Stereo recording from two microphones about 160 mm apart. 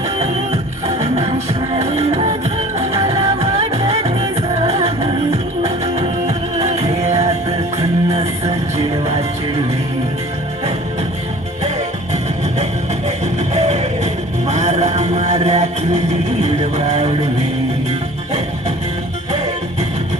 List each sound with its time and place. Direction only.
0.2 s music: 45° right (ahead or behind)
13.1 s music: 45° right (ahead or behind)
16.4 s a sound: 45° right (ahead or behind)